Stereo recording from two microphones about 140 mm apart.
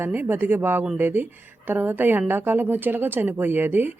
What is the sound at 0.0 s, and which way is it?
Speech, 15° right (ahead or behind).